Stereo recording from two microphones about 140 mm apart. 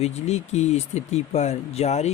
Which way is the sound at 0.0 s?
50° left (ahead or behind).